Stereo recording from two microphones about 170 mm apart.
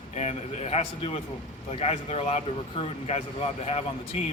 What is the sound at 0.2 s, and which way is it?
Speech, 40° left (ahead or behind).